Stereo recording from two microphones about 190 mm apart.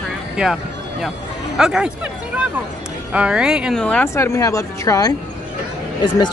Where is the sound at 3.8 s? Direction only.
10° left (ahead or behind).